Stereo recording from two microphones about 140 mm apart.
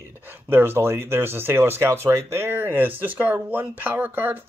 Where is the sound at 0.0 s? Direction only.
15° right (ahead or behind).